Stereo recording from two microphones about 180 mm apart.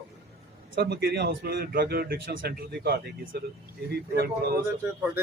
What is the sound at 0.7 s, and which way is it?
Speech, 60° right (ahead or behind).